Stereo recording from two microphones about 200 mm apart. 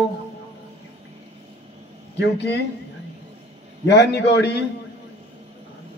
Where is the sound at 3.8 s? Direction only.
60° left (ahead or behind).